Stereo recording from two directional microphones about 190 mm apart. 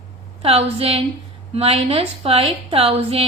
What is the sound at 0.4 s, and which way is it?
A woman's voice, 30° right (ahead or behind).